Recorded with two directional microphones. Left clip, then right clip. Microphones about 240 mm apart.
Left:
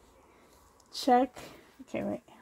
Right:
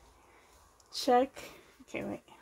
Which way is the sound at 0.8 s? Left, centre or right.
Left.